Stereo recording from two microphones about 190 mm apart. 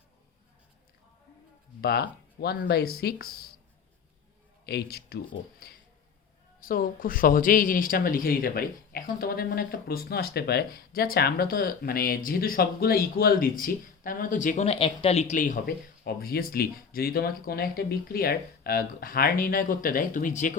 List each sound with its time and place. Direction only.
1.8 s speech: 55° left (ahead or behind)
4.6 s speech: 55° left (ahead or behind)